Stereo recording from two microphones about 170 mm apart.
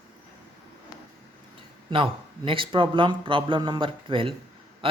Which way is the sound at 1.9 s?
30° right (ahead or behind).